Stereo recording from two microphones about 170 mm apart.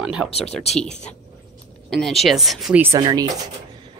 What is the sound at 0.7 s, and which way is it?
Speech, 5° left (ahead or behind).